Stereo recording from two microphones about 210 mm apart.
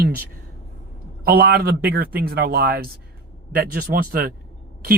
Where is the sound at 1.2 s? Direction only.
45° right (ahead or behind).